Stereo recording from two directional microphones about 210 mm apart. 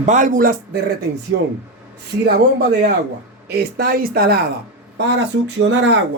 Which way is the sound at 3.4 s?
45° right (ahead or behind).